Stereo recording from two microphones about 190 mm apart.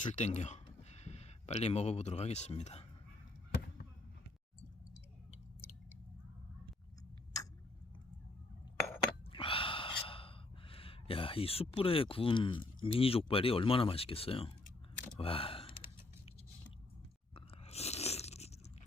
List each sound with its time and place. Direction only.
0.0 s speech: 40° left (ahead or behind)
9.3 s speech: 30° left (ahead or behind)
17.3 s crunch: 30° left (ahead or behind)